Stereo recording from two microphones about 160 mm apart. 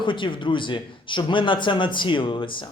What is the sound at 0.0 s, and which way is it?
Speech, 30° left (ahead or behind).